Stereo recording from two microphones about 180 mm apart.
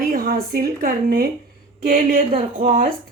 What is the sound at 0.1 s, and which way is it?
Speech, 55° right (ahead or behind).